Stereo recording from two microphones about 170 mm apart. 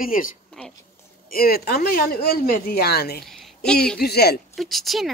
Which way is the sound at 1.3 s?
60° left (ahead or behind).